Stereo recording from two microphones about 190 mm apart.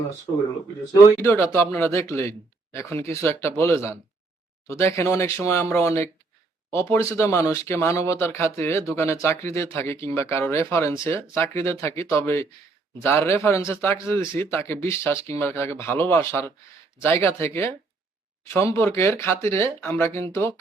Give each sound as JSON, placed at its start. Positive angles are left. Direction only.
{"t": 1.2, "sound": "speech", "side_deg": 10}